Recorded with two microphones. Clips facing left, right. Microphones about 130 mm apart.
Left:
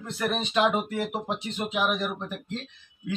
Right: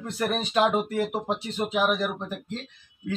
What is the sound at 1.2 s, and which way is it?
Speech, 35° right (ahead or behind).